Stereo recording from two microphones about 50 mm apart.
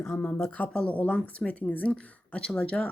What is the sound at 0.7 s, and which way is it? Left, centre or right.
Speech, centre.